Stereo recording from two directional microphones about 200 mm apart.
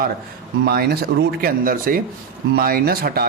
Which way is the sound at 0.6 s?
50° right (ahead or behind).